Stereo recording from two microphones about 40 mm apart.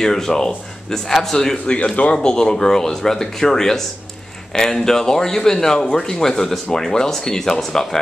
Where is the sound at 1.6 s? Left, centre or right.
Left.